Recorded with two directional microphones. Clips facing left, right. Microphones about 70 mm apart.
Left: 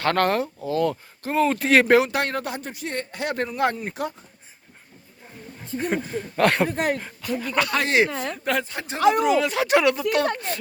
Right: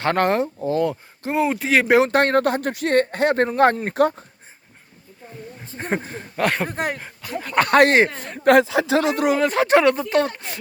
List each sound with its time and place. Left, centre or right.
0.0 s speech: right
1.5 s speech: centre
2.0 s speech: right
5.7 s speech: right
6.3 s speech: centre
7.2 s speech: right
7.5 s speech: right
8.4 s speech: right
9.2 s speech: right
10.3 s speech: centre